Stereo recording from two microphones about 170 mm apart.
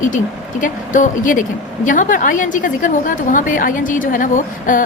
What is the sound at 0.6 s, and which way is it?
A woman's voice, 50° left (ahead or behind).